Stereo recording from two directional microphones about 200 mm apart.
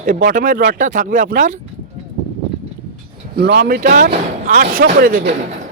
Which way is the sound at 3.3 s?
55° right (ahead or behind).